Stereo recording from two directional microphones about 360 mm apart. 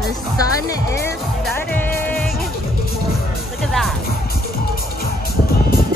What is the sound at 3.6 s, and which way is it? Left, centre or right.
Music, centre.